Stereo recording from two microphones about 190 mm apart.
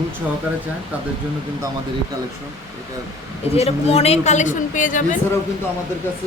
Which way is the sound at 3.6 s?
30° left (ahead or behind).